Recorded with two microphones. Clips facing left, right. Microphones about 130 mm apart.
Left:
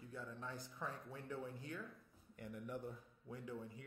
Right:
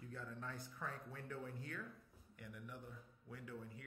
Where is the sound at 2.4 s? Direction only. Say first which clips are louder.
Left 6 dB; 35° left (ahead or behind).